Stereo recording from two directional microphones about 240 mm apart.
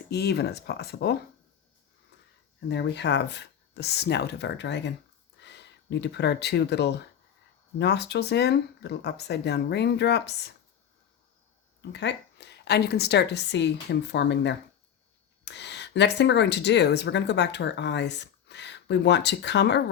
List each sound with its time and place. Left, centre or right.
0.1 s speech: left
2.6 s speech: left
11.8 s speech: left